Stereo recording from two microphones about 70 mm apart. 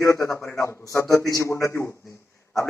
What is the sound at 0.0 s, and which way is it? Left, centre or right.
A man's voice, left.